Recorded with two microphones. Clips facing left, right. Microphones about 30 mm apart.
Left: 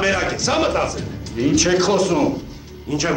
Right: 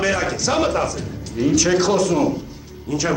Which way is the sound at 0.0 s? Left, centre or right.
Centre.